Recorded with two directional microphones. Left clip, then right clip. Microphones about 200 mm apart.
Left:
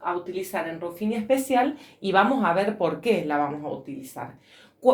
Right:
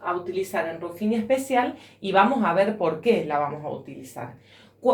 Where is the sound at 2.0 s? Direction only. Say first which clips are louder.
Right 1 dB; 45° left (ahead or behind).